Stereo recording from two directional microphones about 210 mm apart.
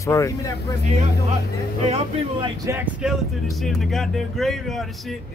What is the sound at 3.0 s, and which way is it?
Speech, centre (ahead or behind).